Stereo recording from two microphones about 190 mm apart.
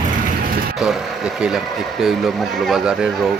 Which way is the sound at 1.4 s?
5° right (ahead or behind).